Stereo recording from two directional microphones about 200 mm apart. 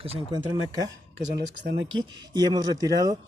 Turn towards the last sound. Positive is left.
turn(degrees=-20)  # may be behind; listen again after turning